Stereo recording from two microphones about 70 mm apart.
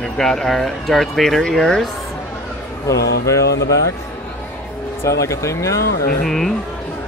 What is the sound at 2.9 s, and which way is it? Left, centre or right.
Speech, left.